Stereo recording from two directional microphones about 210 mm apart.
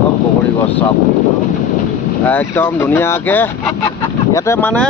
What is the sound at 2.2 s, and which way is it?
Speech, 10° left (ahead or behind).